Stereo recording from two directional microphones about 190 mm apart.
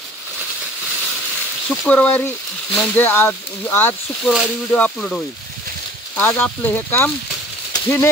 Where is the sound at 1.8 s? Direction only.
10° left (ahead or behind).